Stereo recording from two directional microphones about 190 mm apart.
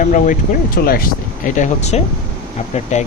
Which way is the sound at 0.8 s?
55° left (ahead or behind).